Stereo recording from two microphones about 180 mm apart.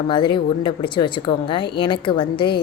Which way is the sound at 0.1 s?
25° left (ahead or behind).